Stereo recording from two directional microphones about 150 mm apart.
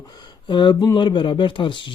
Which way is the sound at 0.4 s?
30° left (ahead or behind).